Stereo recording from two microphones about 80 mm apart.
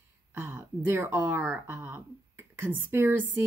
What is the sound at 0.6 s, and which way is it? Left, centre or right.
Speech, right.